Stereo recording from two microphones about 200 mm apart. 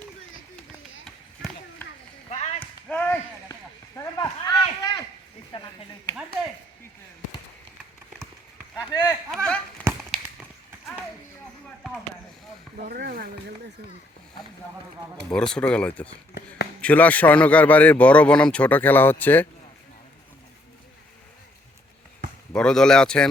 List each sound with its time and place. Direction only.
2.3 s a sound: 35° left (ahead or behind)
2.9 s a sound: 10° left (ahead or behind)
8.7 s speech: 20° left (ahead or behind)
9.3 s chop: 5° left (ahead or behind)
12.9 s speech: 50° right (ahead or behind)
15.3 s a man's voice: 5° left (ahead or behind)
22.5 s speech: 5° left (ahead or behind)